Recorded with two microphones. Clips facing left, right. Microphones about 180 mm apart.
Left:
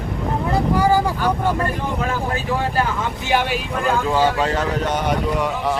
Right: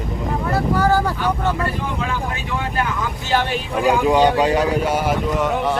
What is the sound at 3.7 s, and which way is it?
Speech, 15° right (ahead or behind).